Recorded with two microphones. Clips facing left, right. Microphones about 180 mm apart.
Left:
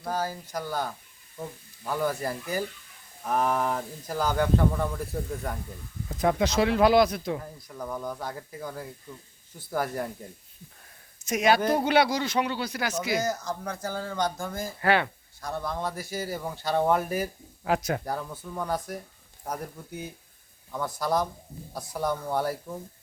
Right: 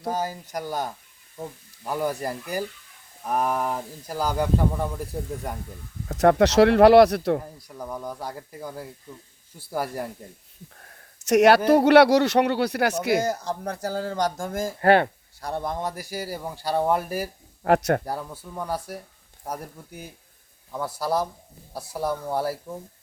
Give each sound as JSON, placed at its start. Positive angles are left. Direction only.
{"t": 0.1, "sound": "speech", "side_deg": -20}
{"t": 6.1, "sound": "speech", "side_deg": -80}
{"t": 7.7, "sound": "speech", "side_deg": -10}
{"t": 11.2, "sound": "speech", "side_deg": -75}
{"t": 13.2, "sound": "speech", "side_deg": -30}
{"t": 15.4, "sound": "speech", "side_deg": -30}
{"t": 15.6, "sound": "speech", "side_deg": -15}
{"t": 17.6, "sound": "speech", "side_deg": -70}
{"t": 18.0, "sound": "speech", "side_deg": -10}